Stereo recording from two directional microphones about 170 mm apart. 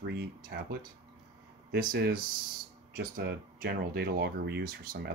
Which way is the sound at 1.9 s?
60° right (ahead or behind).